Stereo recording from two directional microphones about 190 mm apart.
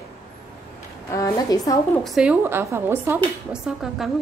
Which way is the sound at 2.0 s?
5° right (ahead or behind).